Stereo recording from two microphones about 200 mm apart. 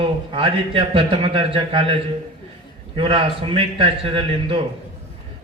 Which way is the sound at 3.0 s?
25° right (ahead or behind).